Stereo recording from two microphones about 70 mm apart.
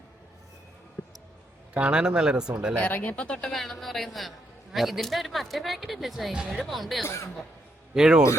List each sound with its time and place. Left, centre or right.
1.0 s basketball bounce: left
1.7 s speech: centre
2.8 s speech: left
3.5 s a man's voice: centre
6.6 s a man's voice: centre